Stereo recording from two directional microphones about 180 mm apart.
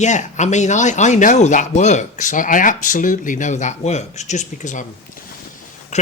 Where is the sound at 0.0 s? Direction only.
40° left (ahead or behind).